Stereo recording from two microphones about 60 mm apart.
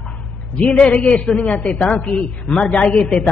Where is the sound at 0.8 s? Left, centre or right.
Centre.